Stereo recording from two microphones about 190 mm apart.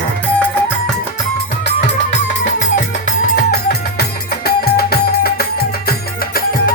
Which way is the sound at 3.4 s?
55° left (ahead or behind).